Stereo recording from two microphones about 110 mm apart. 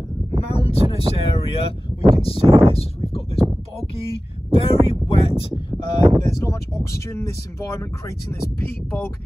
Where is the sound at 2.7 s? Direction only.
60° left (ahead or behind); by 6.0 s 45° left (ahead or behind).